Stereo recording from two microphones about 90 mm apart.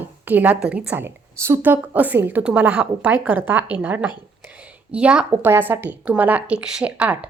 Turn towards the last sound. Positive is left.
turn(degrees=-15)  # may be behind; listen again after turning